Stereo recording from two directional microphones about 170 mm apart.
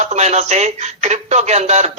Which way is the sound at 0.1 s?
40° right (ahead or behind).